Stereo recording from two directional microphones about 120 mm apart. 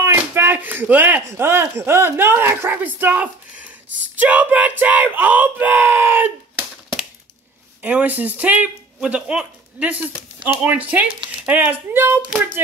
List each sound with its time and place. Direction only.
0.0 s speech: 20° right (ahead or behind)
7.8 s speech: 15° right (ahead or behind)